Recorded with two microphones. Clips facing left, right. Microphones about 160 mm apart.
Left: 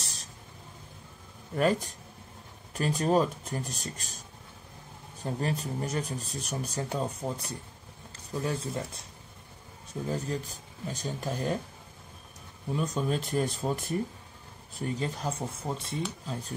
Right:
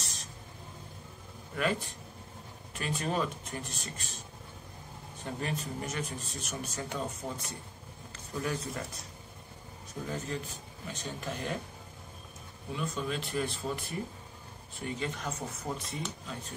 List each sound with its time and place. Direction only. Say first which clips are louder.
0.0 s a sound: even; 35° left (ahead or behind)
1.5 s speech: left 6 dB; 40° left (ahead or behind)
5.2 s speech: left 4 dB; 35° left (ahead or behind)
10.0 s speech: left 4 dB; 35° left (ahead or behind)
12.7 s speech: left 5 dB; 40° left (ahead or behind)